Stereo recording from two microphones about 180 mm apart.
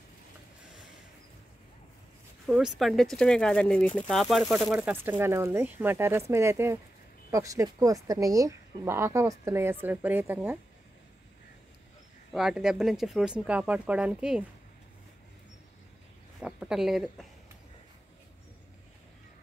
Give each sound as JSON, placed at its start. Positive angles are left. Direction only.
{"t": 2.4, "sound": "speech", "side_deg": 0}
{"t": 12.3, "sound": "speech", "side_deg": -5}
{"t": 16.3, "sound": "a woman's voice", "side_deg": -5}